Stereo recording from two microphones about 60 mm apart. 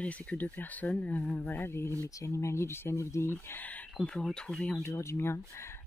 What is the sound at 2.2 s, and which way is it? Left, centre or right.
Speech, left.